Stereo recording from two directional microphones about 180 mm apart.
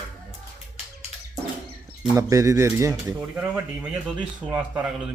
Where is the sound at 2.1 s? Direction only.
15° right (ahead or behind).